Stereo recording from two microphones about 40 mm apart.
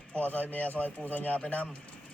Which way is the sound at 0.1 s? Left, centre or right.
Left.